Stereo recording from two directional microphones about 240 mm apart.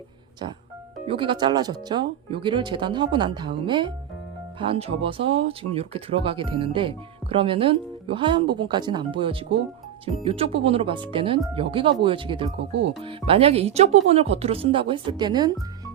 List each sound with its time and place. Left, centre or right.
1.0 s speech: right
12.5 s speech: right
13.0 s speech: right